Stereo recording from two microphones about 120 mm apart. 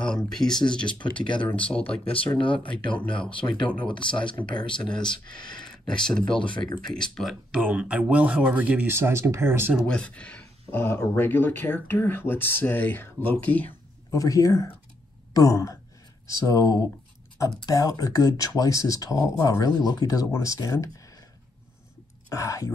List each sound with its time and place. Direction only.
0.0 s speech: 5° left (ahead or behind)
1.2 s speech: 40° left (ahead or behind)
1.5 s speech: 10° left (ahead or behind)
2.0 s speech: 45° left (ahead or behind)
2.7 s speech: 10° left (ahead or behind)
3.1 s speech: 45° left (ahead or behind)
4.8 s speech: 5° left (ahead or behind)
7.6 s speech: 10° right (ahead or behind)
9.9 s speech: 10° left (ahead or behind)
14.1 s speech: 30° left (ahead or behind)
22.3 s speech: 25° left (ahead or behind)